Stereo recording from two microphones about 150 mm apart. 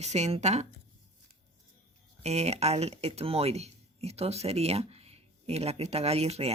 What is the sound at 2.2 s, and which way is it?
Speech, 45° right (ahead or behind).